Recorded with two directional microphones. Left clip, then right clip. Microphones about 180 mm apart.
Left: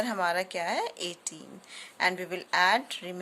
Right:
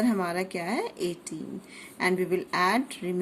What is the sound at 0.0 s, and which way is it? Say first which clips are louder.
Speech: even; 30° left (ahead or behind).